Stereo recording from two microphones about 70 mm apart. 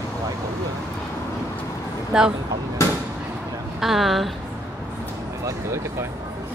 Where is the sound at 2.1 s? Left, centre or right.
Centre.